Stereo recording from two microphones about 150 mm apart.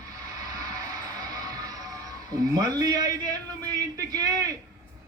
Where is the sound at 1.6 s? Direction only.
25° right (ahead or behind).